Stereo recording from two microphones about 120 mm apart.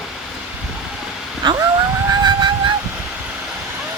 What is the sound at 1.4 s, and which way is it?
Vehicle, 35° right (ahead or behind).